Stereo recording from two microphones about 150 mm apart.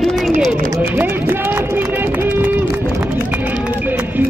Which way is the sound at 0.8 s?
15° right (ahead or behind).